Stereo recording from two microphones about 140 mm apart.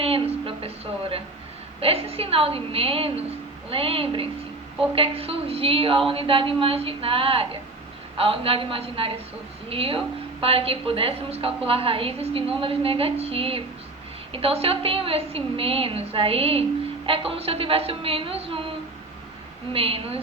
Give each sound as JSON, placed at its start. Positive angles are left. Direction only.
{"t": 0.0, "sound": "a sound", "side_deg": -45}
{"t": 1.8, "sound": "a woman's voice", "side_deg": -45}
{"t": 19.7, "sound": "a woman's voice", "side_deg": -40}